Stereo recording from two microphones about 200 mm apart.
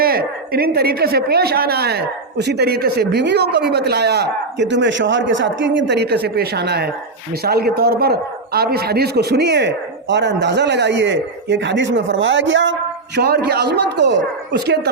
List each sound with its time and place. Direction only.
0.0 s a woman's voice: 50° right (ahead or behind); by 12.7 s 65° right (ahead or behind)
13.1 s a man's voice: 55° right (ahead or behind)